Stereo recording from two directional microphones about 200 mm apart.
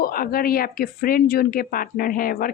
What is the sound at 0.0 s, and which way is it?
Speech, 45° left (ahead or behind).